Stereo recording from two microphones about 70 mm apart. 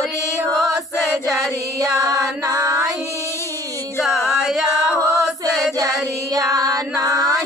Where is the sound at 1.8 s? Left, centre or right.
Right.